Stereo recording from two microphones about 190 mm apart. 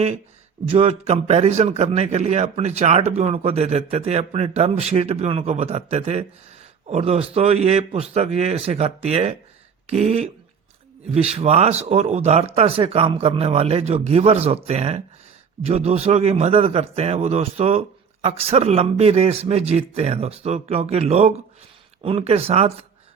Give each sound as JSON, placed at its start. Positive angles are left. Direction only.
{"t": 0.7, "sound": "a man's voice", "side_deg": -30}